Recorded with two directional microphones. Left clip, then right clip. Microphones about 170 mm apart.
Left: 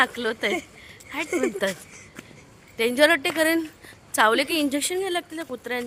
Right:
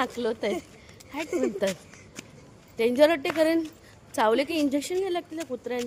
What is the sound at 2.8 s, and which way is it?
Speech, 5° right (ahead or behind).